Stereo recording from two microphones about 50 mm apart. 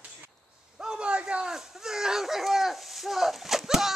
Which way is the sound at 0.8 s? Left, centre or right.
Centre.